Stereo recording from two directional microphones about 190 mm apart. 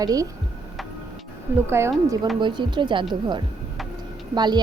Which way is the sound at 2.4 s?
25° right (ahead or behind).